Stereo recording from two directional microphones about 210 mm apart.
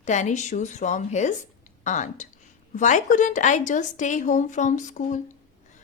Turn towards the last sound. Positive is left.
turn(degrees=35)  # may be behind; listen again after turning